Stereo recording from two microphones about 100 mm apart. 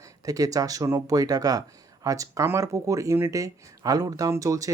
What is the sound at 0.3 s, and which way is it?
Speech, 35° right (ahead or behind).